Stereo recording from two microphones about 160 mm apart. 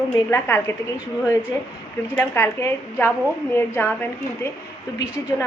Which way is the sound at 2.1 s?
10° left (ahead or behind).